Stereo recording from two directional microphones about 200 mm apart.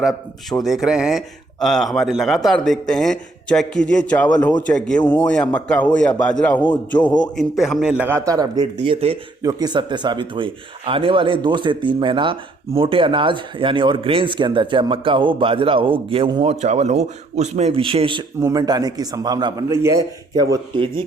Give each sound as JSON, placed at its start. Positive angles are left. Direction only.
{"t": 0.6, "sound": "a man's voice", "side_deg": 0}
{"t": 7.0, "sound": "a man's voice", "side_deg": 20}
{"t": 7.3, "sound": "speech", "side_deg": 0}